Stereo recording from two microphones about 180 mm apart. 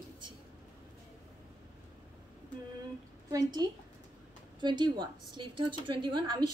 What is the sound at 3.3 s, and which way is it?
A woman's voice, 20° right (ahead or behind).